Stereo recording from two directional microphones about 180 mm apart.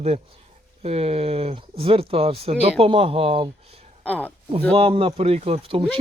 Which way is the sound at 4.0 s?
10° left (ahead or behind).